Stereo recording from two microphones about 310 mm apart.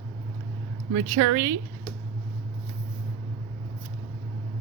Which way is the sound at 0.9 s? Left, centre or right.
Right.